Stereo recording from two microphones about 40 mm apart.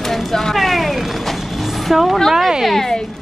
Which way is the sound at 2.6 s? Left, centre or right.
Centre.